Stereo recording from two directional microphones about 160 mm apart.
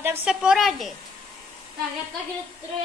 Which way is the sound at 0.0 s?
15° right (ahead or behind).